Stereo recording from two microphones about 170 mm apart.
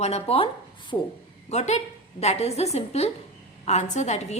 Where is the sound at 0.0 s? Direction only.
35° left (ahead or behind).